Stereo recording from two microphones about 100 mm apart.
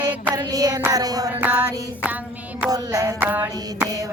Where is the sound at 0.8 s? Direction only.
40° right (ahead or behind).